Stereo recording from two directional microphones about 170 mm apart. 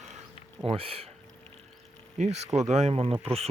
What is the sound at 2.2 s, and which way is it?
Speech, 40° right (ahead or behind).